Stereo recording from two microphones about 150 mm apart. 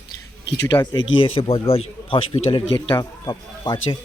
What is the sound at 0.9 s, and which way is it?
Speech, 35° left (ahead or behind).